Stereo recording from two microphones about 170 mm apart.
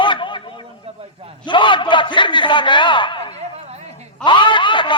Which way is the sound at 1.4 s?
30° left (ahead or behind).